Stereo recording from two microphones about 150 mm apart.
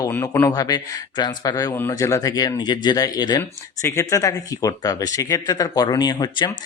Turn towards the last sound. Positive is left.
turn(degrees=25)  # may be behind; listen again after turning